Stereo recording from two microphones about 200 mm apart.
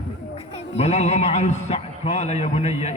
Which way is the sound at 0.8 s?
35° left (ahead or behind).